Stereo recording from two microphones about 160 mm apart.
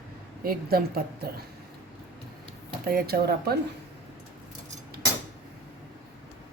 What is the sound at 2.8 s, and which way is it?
Speech, 65° right (ahead or behind).